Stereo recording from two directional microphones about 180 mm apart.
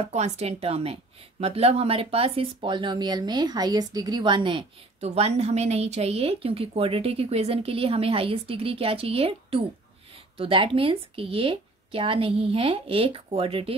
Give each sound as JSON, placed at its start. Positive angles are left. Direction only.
{"t": 0.0, "sound": "speech", "side_deg": -35}